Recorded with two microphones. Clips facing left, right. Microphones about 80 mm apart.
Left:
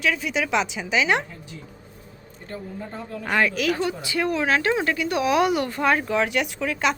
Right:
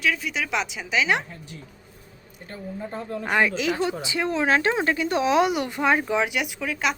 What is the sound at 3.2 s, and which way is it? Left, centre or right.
Speech, centre.